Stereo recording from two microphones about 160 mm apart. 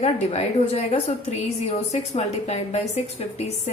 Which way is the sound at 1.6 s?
40° left (ahead or behind).